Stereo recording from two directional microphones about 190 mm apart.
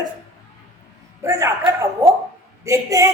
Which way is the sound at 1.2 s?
15° right (ahead or behind).